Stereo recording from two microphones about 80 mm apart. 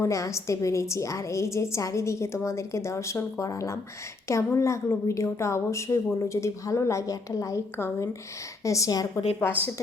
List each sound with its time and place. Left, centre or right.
0.0 s a woman's voice: left